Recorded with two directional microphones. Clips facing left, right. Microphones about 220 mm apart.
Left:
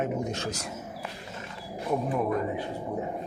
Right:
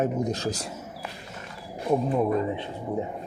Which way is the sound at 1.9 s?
25° right (ahead or behind).